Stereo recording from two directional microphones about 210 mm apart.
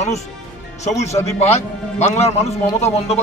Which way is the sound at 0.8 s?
30° left (ahead or behind).